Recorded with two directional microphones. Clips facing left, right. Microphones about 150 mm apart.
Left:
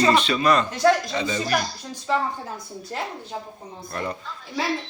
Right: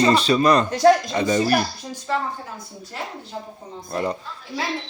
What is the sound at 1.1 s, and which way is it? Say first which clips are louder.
Speech: right 6 dB; 50° right (ahead or behind).